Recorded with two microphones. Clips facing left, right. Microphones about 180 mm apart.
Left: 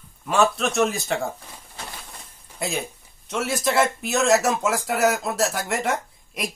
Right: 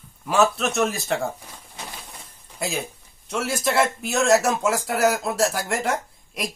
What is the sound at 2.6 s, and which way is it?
A man's voice, centre (ahead or behind).